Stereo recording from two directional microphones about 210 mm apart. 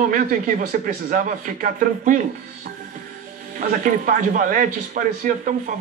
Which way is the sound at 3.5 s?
40° right (ahead or behind).